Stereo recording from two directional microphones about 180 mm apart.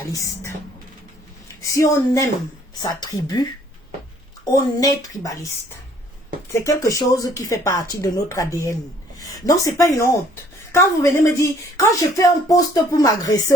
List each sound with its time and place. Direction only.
0.0 s speech: 20° left (ahead or behind)
1.6 s speech: 20° left (ahead or behind)
4.5 s speech: 20° left (ahead or behind)
6.5 s speech: 20° left (ahead or behind)